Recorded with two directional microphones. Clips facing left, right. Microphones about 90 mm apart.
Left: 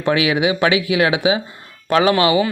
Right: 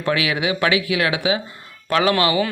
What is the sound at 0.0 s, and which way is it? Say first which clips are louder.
Speech: left 4 dB; 25° left (ahead or behind).